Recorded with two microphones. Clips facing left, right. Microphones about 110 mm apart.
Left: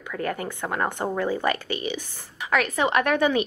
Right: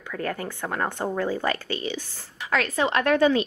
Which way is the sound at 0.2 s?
20° left (ahead or behind).